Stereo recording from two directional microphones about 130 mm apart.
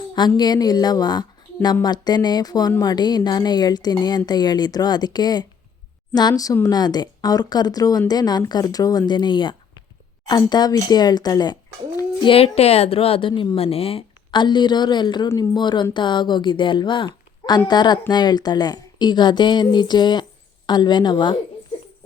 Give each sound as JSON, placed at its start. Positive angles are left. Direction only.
{"t": 0.1, "sound": "speech", "side_deg": 35}